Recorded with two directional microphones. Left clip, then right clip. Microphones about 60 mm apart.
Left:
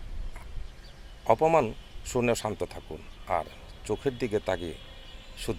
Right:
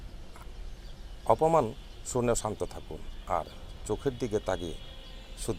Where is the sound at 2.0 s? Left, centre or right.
Left.